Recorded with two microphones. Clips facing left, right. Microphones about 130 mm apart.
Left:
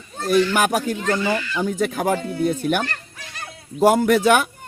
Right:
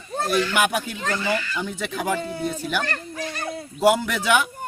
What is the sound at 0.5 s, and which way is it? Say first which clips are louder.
Speech: left 3 dB; 40° left (ahead or behind).